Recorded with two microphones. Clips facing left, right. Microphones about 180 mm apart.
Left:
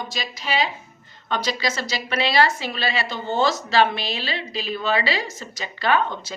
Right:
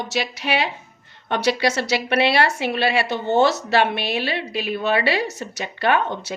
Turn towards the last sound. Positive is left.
turn(degrees=-60)  # may be behind; listen again after turning